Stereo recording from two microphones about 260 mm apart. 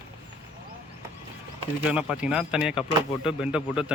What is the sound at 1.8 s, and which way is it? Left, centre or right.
Speech, centre.